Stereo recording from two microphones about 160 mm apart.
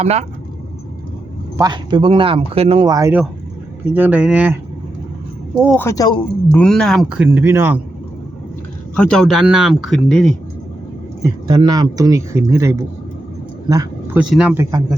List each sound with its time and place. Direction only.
0.0 s speech: 40° right (ahead or behind)
1.5 s speech: 25° right (ahead or behind)
2.8 s speech: 25° right (ahead or behind)
3.9 s speech: 10° right (ahead or behind)
5.7 s speech: 15° left (ahead or behind)
6.5 s speech: 5° left (ahead or behind); by 7.8 s 15° right (ahead or behind)
9.0 s speech: 5° left (ahead or behind)
11.2 s speech: 25° right (ahead or behind)
13.7 s a sound: 20° right (ahead or behind)
14.2 s speech: 5° right (ahead or behind)